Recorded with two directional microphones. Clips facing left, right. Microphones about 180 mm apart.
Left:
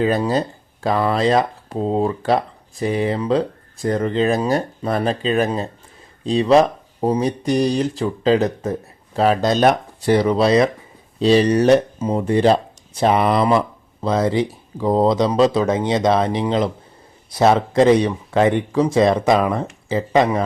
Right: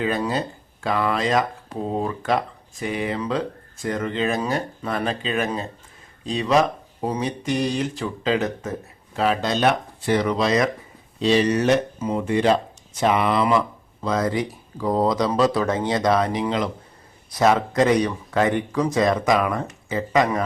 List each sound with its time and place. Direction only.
0.0 s speech: 35° left (ahead or behind)